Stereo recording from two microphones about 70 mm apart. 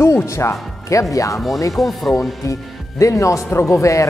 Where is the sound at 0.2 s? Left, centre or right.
Left.